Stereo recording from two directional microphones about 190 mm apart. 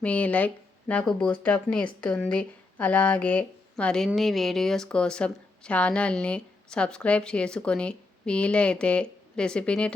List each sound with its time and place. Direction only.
0.0 s speech: 5° left (ahead or behind)